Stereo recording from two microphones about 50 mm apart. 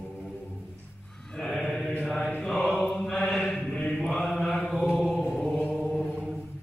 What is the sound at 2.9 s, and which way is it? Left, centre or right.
Mantra, centre.